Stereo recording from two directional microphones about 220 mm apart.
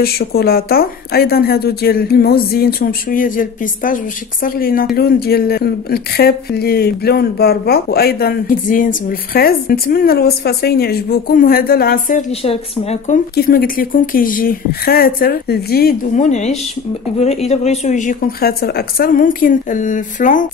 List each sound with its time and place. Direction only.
0.0 s a woman's voice: 45° left (ahead or behind)